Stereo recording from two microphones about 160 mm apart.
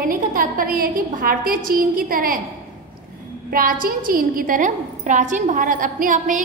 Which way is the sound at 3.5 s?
65° right (ahead or behind).